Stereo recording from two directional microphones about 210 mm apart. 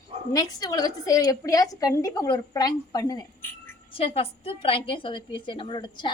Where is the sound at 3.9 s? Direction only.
25° left (ahead or behind).